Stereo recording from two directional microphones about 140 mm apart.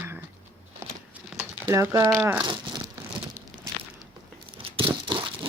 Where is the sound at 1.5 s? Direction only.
15° right (ahead or behind).